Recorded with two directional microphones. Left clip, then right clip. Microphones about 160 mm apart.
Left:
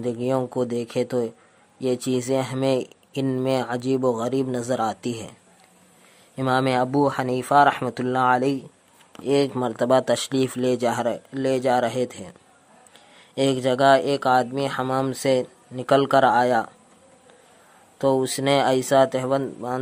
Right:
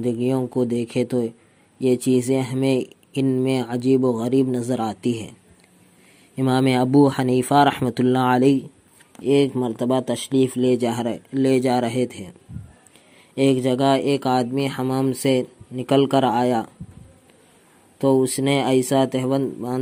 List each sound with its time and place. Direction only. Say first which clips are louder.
0.0 s speech: right 1 dB; 10° right (ahead or behind)
6.3 s speech: right 1 dB; 20° right (ahead or behind)
9.2 s speech: right 2 dB; 10° right (ahead or behind)
17.9 s speech: right 2 dB; 10° right (ahead or behind)